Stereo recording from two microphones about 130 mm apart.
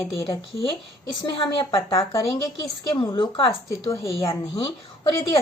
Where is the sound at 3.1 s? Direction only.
40° left (ahead or behind).